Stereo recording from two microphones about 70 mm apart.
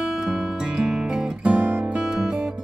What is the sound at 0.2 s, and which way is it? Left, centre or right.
Music, centre.